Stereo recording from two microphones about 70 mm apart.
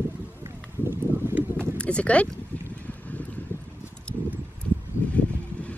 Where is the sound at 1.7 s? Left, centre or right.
Centre.